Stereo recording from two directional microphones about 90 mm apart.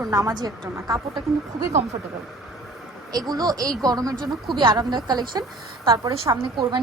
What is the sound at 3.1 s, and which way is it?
A woman's voice, 45° right (ahead or behind).